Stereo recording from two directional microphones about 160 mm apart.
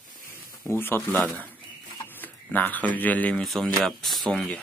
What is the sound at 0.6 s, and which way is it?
Speech, 15° left (ahead or behind).